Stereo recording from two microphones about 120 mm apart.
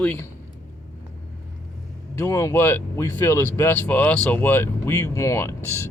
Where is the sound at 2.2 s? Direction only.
25° left (ahead or behind).